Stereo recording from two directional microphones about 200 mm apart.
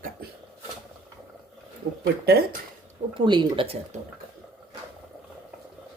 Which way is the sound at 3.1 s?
25° right (ahead or behind).